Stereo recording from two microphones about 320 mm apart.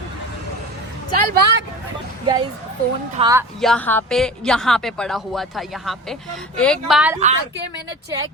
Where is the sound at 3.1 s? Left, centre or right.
Centre.